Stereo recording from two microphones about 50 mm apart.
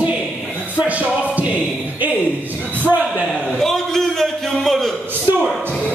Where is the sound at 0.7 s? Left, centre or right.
Right.